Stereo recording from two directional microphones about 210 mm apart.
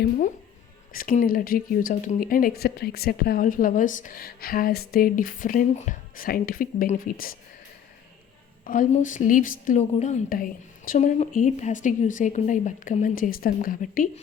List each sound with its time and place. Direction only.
0.9 s speech: 40° left (ahead or behind)
8.6 s a woman's voice: 40° left (ahead or behind)